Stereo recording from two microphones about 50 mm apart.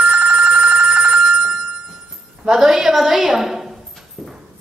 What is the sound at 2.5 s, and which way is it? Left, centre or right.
A woman's voice, centre.